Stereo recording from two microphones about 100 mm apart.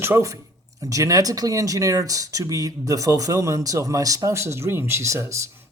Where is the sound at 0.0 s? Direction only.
25° right (ahead or behind).